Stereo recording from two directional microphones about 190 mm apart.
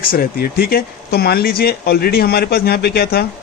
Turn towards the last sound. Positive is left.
turn(degrees=55)  # may be behind; listen again after turning